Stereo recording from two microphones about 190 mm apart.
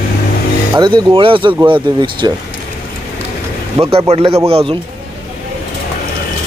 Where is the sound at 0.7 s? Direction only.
25° right (ahead or behind).